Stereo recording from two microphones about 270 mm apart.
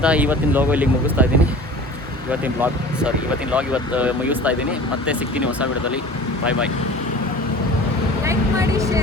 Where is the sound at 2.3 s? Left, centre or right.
Centre.